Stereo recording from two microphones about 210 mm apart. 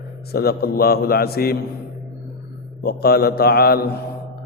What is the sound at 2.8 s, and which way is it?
A man's voice, 45° left (ahead or behind).